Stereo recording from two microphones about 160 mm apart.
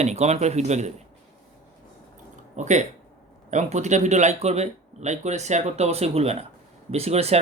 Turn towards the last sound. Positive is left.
turn(degrees=-40)  # may be behind; listen again after turning